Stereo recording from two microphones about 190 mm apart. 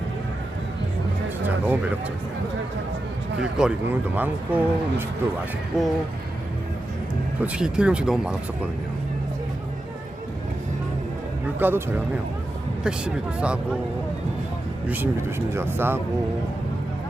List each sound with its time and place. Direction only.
1.5 s music: 10° right (ahead or behind)
3.6 s speech: 5° right (ahead or behind)
7.4 s speech: 5° right (ahead or behind)
11.6 s speech: 10° right (ahead or behind)
14.8 s speech: 10° right (ahead or behind)